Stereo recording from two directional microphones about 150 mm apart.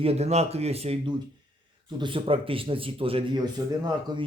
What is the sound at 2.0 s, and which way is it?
Speech, 35° right (ahead or behind).